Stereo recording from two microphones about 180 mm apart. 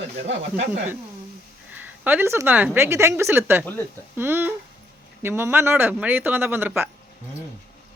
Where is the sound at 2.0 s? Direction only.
10° right (ahead or behind).